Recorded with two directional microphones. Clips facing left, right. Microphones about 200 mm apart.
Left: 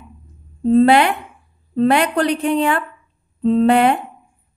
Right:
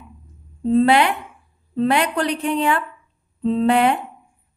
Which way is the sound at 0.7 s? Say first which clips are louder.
Left 3 dB; 50° left (ahead or behind).